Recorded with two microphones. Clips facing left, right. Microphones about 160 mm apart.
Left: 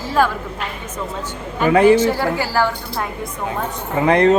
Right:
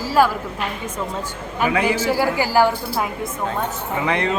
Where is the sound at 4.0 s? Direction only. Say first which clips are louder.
Left 9 dB; 45° left (ahead or behind).